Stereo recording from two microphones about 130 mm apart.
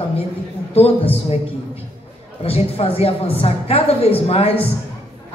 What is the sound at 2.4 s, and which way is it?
Speech, 50° left (ahead or behind).